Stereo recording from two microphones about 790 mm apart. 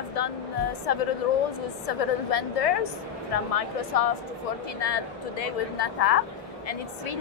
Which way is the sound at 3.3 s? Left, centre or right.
Left.